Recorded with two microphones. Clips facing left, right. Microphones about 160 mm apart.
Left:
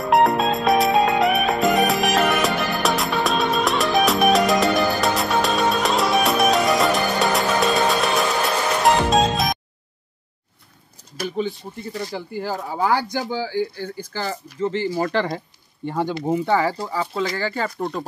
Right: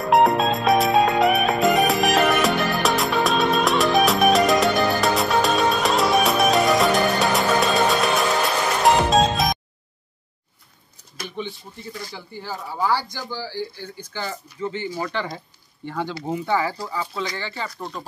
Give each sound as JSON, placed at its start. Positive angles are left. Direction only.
{"t": 0.0, "sound": "music", "side_deg": 0}
{"t": 12.1, "sound": "speech", "side_deg": 50}
{"t": 15.9, "sound": "speech", "side_deg": 20}
{"t": 16.4, "sound": "speech", "side_deg": 35}
{"t": 17.1, "sound": "speech", "side_deg": 45}